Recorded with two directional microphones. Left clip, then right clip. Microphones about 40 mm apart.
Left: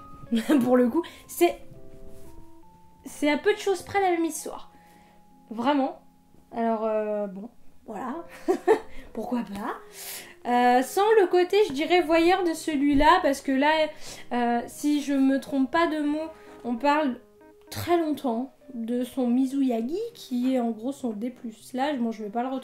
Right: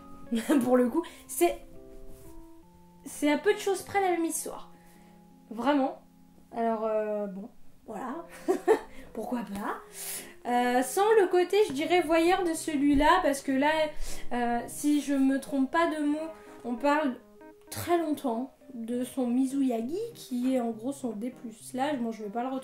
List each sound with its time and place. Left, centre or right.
0.3 s speech: right
3.0 s speech: right